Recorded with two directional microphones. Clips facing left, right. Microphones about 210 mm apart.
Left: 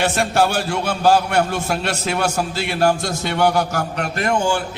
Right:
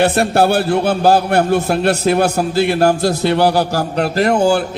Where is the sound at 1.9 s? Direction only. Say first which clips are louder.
Right 9 dB; 60° right (ahead or behind).